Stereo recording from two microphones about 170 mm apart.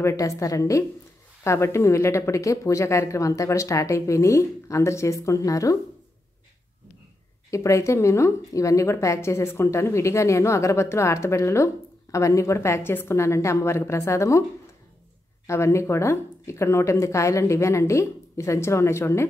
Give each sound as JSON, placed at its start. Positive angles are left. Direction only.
{"t": 0.0, "sound": "a woman's voice", "side_deg": 20}
{"t": 7.5, "sound": "a woman's voice", "side_deg": 15}
{"t": 15.4, "sound": "a woman's voice", "side_deg": 15}